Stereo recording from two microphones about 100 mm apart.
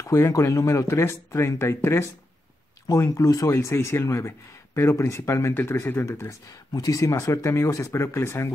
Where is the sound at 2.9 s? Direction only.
35° left (ahead or behind); by 6.0 s 20° left (ahead or behind).